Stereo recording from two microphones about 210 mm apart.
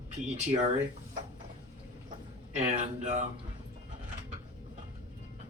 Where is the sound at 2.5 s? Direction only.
35° right (ahead or behind).